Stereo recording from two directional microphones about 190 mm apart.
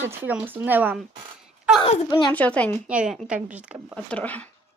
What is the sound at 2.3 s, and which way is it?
Speech, 5° left (ahead or behind).